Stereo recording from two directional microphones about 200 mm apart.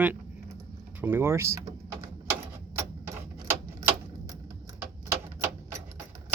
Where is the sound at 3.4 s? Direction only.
15° right (ahead or behind).